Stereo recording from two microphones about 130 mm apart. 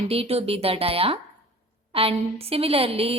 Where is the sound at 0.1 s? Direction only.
50° right (ahead or behind).